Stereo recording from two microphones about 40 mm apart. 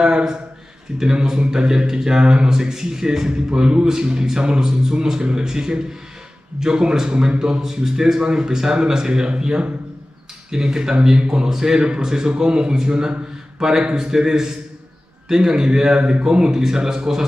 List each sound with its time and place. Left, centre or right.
0.0 s a man's voice: centre